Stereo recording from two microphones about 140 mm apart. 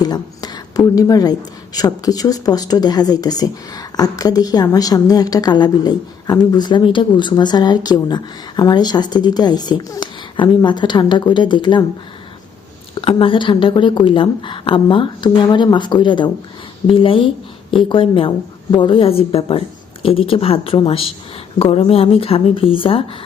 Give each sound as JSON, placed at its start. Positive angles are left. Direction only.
{"t": 0.0, "sound": "a woman's voice", "side_deg": 30}
{"t": 12.9, "sound": "a woman's voice", "side_deg": 40}